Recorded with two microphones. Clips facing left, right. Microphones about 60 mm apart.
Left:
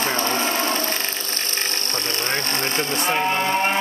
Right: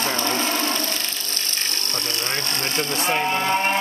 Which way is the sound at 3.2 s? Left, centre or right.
Left.